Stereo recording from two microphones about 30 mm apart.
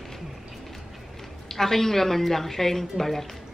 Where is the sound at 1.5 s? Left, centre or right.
Centre.